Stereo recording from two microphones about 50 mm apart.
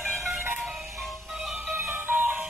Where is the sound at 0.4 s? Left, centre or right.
Right.